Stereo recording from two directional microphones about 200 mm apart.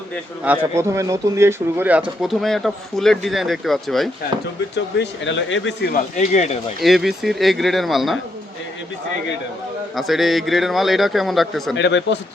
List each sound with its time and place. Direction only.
0.4 s speech: 10° right (ahead or behind)
4.7 s speech: 65° left (ahead or behind)
5.9 s speech: 35° left (ahead or behind)
6.8 s speech: centre (ahead or behind)
9.9 s speech: centre (ahead or behind)
11.8 s speech: 60° left (ahead or behind)